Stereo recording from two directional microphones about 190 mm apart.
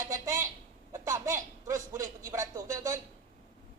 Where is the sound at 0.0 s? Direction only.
15° right (ahead or behind).